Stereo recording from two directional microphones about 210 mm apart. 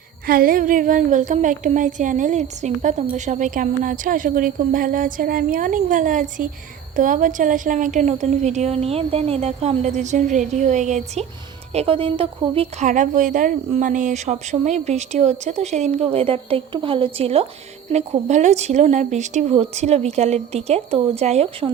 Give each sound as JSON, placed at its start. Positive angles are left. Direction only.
{"t": 0.3, "sound": "a woman's voice", "side_deg": -45}